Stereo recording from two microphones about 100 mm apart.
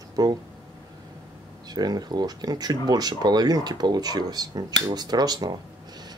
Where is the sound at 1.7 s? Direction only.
40° right (ahead or behind).